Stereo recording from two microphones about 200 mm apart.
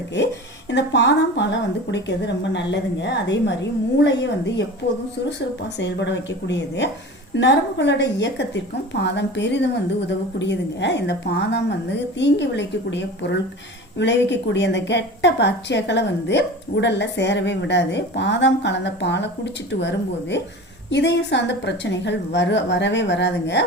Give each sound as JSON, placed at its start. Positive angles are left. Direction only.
{"t": 0.7, "sound": "a woman's voice", "side_deg": 60}
{"t": 5.8, "sound": "a woman's voice", "side_deg": 60}